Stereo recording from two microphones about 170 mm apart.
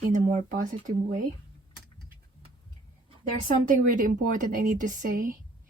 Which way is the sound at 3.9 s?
50° right (ahead or behind).